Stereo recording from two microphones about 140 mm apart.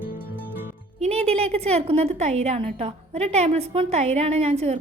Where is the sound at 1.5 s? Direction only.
50° right (ahead or behind).